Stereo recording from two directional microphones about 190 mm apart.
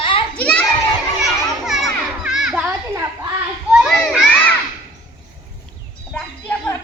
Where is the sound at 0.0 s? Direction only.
25° left (ahead or behind).